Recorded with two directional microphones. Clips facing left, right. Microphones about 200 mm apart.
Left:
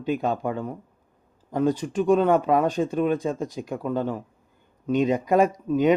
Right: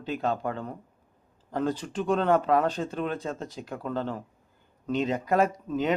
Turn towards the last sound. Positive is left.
turn(degrees=15)  # may be behind; listen again after turning